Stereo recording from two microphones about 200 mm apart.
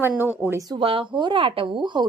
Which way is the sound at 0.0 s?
10° right (ahead or behind).